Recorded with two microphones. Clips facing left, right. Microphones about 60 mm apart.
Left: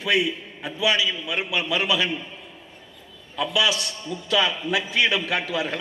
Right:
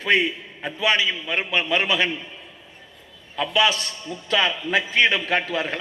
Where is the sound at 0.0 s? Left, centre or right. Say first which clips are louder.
Right 2 dB; right.